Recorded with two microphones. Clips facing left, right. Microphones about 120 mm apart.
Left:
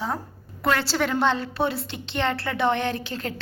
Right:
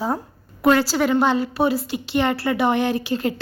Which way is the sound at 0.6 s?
15° right (ahead or behind).